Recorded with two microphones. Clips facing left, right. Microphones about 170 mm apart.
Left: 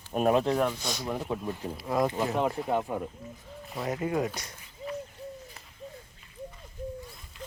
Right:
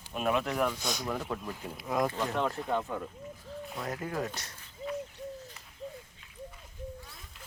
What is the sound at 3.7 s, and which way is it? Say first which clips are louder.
Speech: left 7 dB; 5° left (ahead or behind).